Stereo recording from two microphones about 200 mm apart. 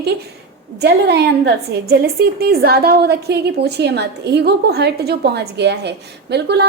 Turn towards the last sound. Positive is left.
turn(degrees=-55)  # may be behind; listen again after turning